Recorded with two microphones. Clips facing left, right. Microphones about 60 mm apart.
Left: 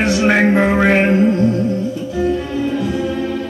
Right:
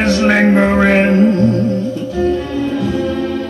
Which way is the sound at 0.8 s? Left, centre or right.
Centre.